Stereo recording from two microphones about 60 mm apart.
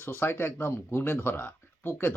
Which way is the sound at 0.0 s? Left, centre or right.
Left.